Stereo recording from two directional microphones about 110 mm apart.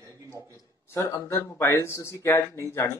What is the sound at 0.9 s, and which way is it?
Speech, 25° left (ahead or behind).